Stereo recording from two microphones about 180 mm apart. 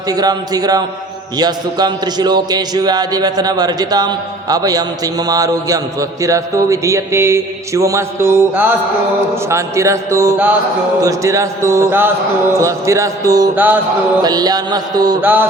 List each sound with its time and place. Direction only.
0.1 s a man's voice: 20° right (ahead or behind)
14.2 s a man's voice: 20° right (ahead or behind)
15.2 s speech: 10° right (ahead or behind)